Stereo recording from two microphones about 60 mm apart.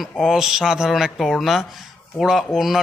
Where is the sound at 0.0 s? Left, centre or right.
Centre.